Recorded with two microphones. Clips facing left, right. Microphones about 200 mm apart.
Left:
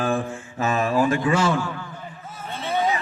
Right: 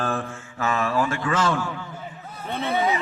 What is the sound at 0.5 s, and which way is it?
Speech, 20° left (ahead or behind).